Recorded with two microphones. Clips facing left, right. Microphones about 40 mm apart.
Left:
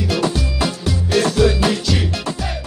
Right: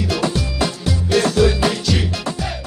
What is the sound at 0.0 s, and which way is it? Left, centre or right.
Music, centre.